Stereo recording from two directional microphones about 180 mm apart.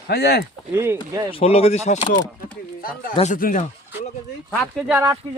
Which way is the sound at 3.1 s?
40° left (ahead or behind).